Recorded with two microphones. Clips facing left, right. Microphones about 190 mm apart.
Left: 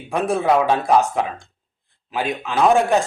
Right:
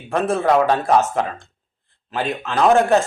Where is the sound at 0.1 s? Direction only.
Centre (ahead or behind).